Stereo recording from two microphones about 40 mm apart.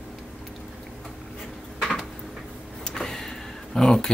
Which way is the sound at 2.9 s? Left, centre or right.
Centre.